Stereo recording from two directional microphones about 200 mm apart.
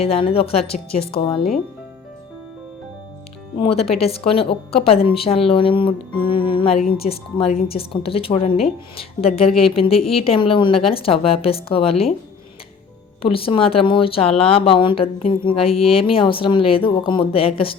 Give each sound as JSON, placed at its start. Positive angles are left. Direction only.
{"t": 0.0, "sound": "a woman's voice", "side_deg": 30}
{"t": 3.6, "sound": "a woman's voice", "side_deg": 30}
{"t": 13.2, "sound": "a woman's voice", "side_deg": 25}